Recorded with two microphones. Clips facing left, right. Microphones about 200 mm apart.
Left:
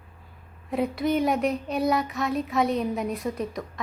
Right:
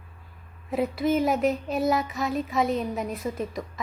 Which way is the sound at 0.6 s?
Centre (ahead or behind).